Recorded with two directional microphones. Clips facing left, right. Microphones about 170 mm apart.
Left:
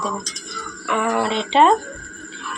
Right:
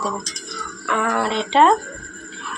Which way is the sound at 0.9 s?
10° left (ahead or behind).